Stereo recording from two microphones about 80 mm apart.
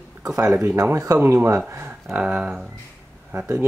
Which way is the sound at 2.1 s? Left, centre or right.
Centre.